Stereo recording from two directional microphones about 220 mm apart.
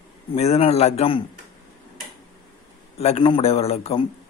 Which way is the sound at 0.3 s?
30° left (ahead or behind).